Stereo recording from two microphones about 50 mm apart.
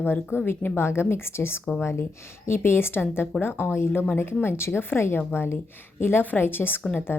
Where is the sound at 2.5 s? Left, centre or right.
Left.